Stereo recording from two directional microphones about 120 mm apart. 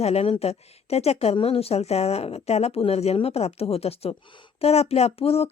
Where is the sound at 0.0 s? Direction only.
60° left (ahead or behind).